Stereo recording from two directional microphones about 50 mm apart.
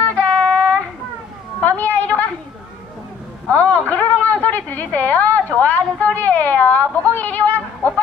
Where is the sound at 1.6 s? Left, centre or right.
Left.